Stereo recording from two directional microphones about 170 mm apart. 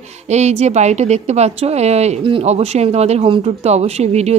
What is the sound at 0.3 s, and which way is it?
Speech, 40° right (ahead or behind).